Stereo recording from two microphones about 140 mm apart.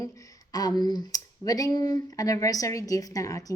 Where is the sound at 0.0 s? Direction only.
25° left (ahead or behind).